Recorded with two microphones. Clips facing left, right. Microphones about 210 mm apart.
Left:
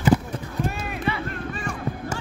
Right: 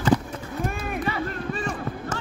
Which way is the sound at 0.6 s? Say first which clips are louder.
Right 1 dB; 50° right (ahead or behind).